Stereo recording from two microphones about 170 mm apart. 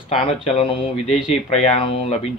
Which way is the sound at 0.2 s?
30° left (ahead or behind).